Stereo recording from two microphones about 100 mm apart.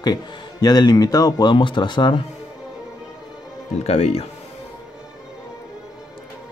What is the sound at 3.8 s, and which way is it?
Speech, 90° left.